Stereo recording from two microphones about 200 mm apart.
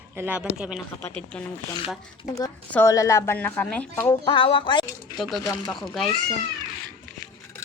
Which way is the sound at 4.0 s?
20° left (ahead or behind).